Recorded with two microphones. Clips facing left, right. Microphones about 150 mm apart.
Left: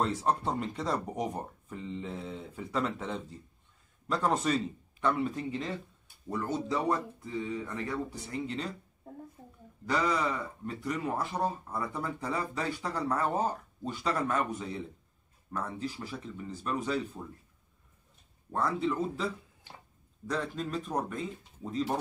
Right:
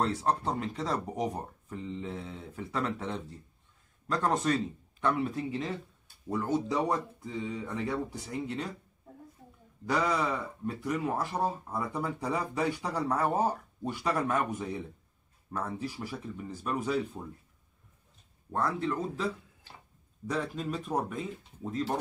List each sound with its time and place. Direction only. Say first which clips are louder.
0.0 s speech: even; centre (ahead or behind)
9.8 s speech: right 1 dB; 10° right (ahead or behind)
18.5 s speech: even; centre (ahead or behind)
20.2 s speech: right 1 dB; 5° right (ahead or behind)